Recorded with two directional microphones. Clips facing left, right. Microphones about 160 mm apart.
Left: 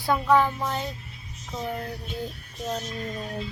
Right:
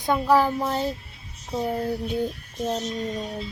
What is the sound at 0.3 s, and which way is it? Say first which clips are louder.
Child singing: right 2 dB; 35° right (ahead or behind).